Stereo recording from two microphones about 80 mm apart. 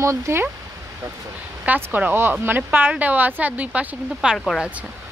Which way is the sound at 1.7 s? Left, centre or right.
Right.